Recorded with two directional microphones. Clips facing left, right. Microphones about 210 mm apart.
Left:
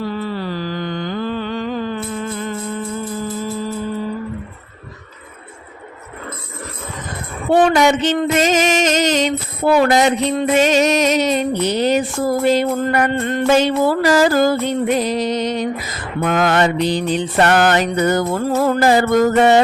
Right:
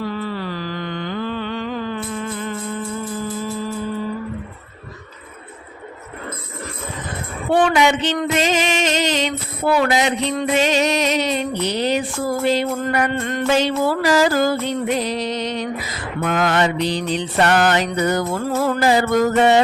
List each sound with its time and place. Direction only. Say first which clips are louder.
0.0 s mantra: left 2 dB; 30° left (ahead or behind)
7.5 s music: left 3 dB; 40° left (ahead or behind)
13.1 s music: left 3 dB; 30° left (ahead or behind)
13.5 s music: left 3 dB; 50° left (ahead or behind)